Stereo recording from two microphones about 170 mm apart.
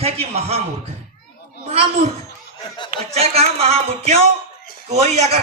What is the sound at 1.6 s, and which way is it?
Speech, 40° right (ahead or behind).